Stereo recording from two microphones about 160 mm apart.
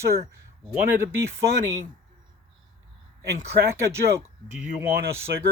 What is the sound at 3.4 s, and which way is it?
Speech, 15° right (ahead or behind).